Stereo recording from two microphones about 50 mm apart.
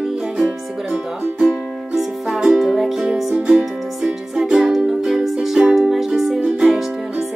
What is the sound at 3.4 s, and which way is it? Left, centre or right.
Music, right.